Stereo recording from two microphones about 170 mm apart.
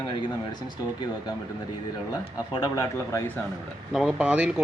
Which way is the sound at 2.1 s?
25° left (ahead or behind).